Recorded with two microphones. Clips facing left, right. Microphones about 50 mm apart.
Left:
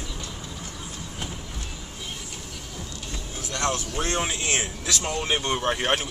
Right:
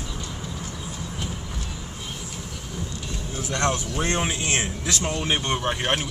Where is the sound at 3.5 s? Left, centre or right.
Right.